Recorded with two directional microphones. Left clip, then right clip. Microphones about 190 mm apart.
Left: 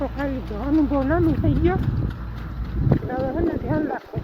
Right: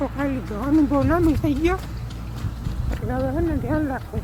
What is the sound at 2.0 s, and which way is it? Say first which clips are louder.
Clip-clop: left 2 dB; 15° left (ahead or behind).